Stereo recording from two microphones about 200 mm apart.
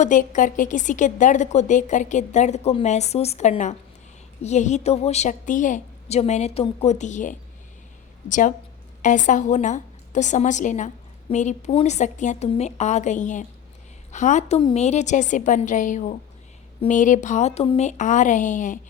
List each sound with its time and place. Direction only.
0.0 s a woman's voice: 40° left (ahead or behind)